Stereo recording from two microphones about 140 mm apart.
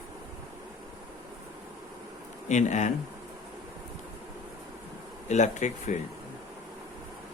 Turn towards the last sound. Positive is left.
turn(degrees=60)  # may be behind; listen again after turning